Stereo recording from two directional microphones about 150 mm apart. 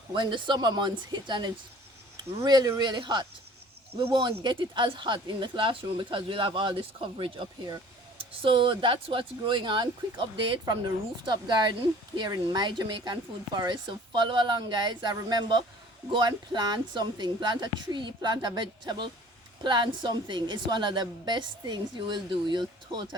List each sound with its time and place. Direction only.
0.1 s speech: 30° right (ahead or behind)